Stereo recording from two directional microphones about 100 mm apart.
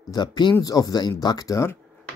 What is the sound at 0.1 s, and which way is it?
Speech, 45° left (ahead or behind).